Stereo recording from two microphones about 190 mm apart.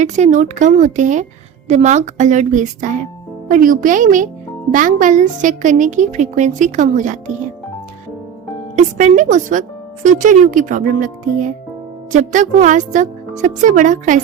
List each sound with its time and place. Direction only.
0.0 s a woman's voice: 40° right (ahead or behind)
8.7 s a woman's voice: 40° right (ahead or behind)